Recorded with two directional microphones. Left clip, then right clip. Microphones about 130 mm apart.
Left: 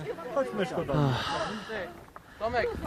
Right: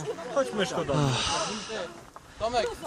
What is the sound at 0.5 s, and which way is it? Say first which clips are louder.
Speech: right 2 dB; 25° left (ahead or behind).